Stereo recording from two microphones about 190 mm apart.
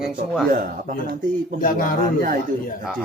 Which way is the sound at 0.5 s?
45° right (ahead or behind).